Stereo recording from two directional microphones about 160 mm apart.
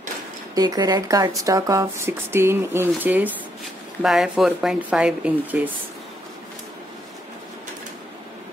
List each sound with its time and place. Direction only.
0.6 s speech: 25° right (ahead or behind)